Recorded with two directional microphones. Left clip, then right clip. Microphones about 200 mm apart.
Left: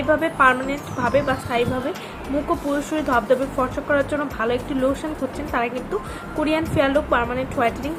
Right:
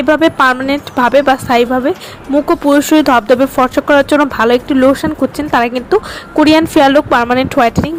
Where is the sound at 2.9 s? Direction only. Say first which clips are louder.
Right 8 dB; 45° right (ahead or behind).